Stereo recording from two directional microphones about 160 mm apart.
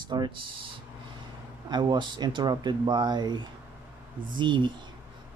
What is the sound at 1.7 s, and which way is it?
Speech, 25° right (ahead or behind).